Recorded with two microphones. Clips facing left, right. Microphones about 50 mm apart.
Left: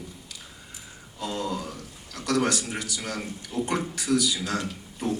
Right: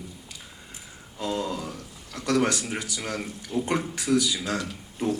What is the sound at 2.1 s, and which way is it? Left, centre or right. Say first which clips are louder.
A man's voice: right 1 dB; right.